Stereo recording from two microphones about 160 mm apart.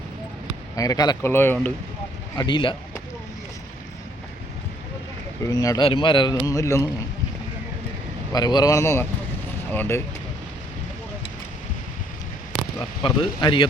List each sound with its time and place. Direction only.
0.8 s speech: 25° left (ahead or behind)
2.4 s speech: 30° left (ahead or behind)
5.4 s a man's voice: 25° left (ahead or behind)
6.4 s speech: 20° left (ahead or behind)
8.3 s speech: 25° left (ahead or behind)
13.0 s speech: 30° left (ahead or behind)